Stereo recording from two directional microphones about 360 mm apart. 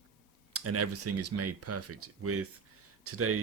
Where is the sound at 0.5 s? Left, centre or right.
Right.